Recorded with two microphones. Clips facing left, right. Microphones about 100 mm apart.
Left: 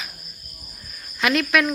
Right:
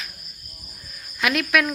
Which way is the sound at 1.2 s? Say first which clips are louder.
Left 1 dB; centre (ahead or behind).